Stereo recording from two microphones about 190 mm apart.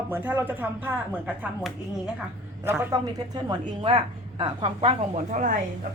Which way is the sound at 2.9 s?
20° right (ahead or behind).